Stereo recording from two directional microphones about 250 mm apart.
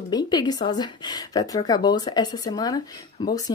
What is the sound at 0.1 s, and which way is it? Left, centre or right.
Speech, centre.